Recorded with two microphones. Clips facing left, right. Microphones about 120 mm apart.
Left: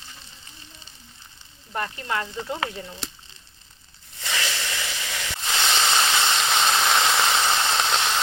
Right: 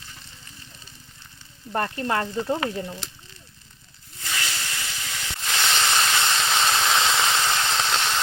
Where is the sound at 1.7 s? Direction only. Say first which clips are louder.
Right 3 dB; 40° right (ahead or behind).